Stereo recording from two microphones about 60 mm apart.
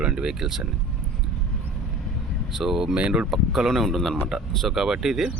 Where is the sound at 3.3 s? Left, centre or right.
Centre.